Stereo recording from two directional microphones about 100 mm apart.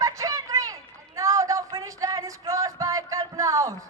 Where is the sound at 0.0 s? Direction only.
35° right (ahead or behind).